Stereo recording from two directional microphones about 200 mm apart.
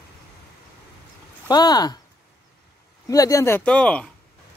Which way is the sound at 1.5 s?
20° left (ahead or behind).